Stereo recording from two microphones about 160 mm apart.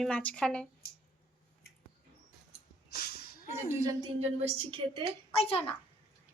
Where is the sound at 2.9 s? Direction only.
80° left.